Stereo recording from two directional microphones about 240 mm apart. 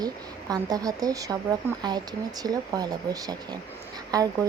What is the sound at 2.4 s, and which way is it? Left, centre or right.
A woman's voice, centre.